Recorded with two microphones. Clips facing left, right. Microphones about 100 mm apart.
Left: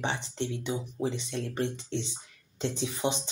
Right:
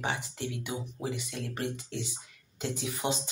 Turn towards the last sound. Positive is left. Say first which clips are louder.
# left 2 dB
turn(degrees=25)  # may be behind; listen again after turning